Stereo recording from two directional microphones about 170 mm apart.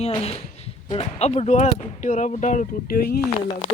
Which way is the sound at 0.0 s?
35° left (ahead or behind).